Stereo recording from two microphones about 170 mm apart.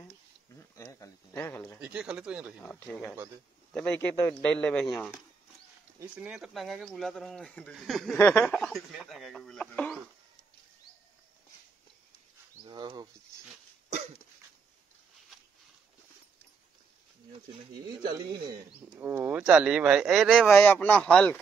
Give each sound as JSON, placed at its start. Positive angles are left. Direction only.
{"t": 0.6, "sound": "a sound", "side_deg": 15}
{"t": 1.8, "sound": "speech", "side_deg": -5}
{"t": 2.6, "sound": "a man's voice", "side_deg": 10}
{"t": 8.2, "sound": "speech", "side_deg": 10}
{"t": 12.6, "sound": "speech", "side_deg": -25}
{"t": 17.9, "sound": "speech", "side_deg": -25}
{"t": 18.8, "sound": "speech", "side_deg": -10}
{"t": 20.5, "sound": "a man's voice", "side_deg": 10}